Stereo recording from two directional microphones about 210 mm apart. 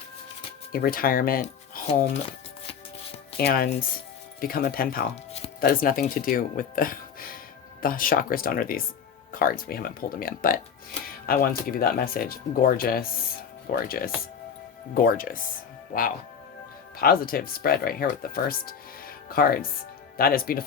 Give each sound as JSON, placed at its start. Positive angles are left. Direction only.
{"t": 0.7, "sound": "speech", "side_deg": 45}
{"t": 3.3, "sound": "speech", "side_deg": 45}
{"t": 17.0, "sound": "speech", "side_deg": 45}